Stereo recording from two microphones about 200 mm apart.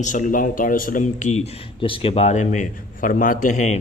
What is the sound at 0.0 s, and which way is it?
A man's voice, 40° left (ahead or behind).